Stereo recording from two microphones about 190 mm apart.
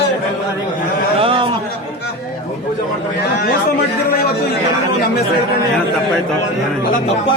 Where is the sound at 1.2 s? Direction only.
25° right (ahead or behind).